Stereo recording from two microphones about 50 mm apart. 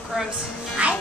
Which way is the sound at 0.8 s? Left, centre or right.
Right.